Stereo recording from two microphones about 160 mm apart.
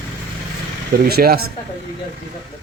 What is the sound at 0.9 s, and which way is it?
Speech, 75° right (ahead or behind).